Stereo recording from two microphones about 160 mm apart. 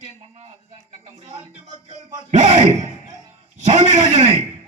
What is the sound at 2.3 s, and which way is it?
Speech, 45° right (ahead or behind).